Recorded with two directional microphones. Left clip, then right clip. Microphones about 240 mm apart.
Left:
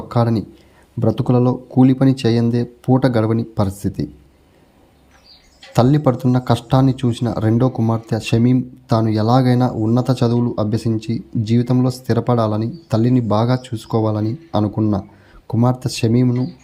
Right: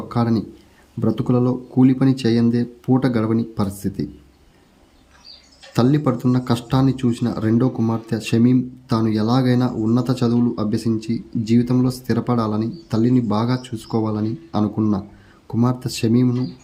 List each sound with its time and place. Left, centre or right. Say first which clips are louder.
0.1 s a man's voice: left 3 dB; centre
5.7 s speech: left 3 dB; centre